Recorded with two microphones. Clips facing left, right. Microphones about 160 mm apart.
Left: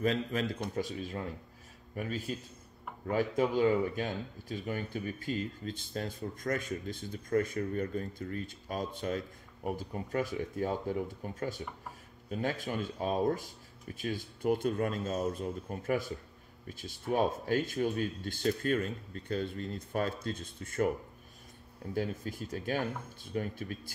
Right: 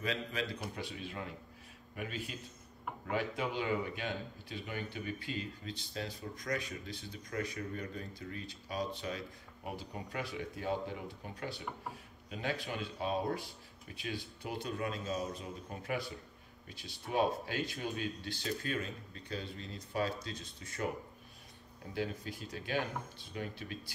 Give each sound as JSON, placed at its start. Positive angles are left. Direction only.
{"t": 0.0, "sound": "speech", "side_deg": 45}
{"t": 21.9, "sound": "speech", "side_deg": 45}